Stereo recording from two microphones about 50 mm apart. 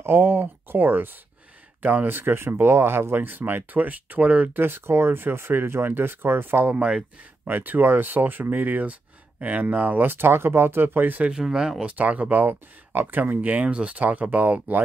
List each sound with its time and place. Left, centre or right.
0.0 s speech: right
2.0 s speech: right
3.3 s speech: right
4.6 s speech: right
6.7 s speech: right
7.4 s speech: right
11.2 s speech: centre
11.8 s speech: right